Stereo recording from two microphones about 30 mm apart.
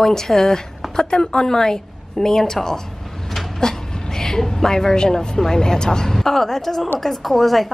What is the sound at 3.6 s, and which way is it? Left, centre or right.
A woman's voice, left.